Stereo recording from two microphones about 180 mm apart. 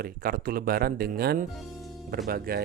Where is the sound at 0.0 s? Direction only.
55° right (ahead or behind).